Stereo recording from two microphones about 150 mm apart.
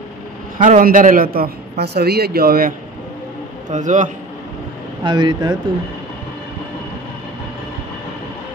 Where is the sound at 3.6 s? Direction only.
55° right (ahead or behind).